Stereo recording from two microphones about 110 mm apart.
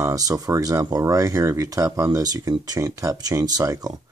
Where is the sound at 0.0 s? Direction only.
35° right (ahead or behind).